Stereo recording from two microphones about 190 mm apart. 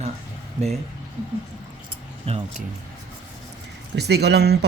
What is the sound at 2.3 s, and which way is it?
Speech, 30° right (ahead or behind).